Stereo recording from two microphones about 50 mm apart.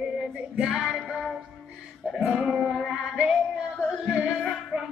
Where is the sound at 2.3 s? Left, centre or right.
Centre.